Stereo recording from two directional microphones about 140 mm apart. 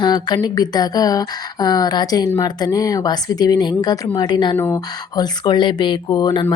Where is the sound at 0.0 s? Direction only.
30° left (ahead or behind).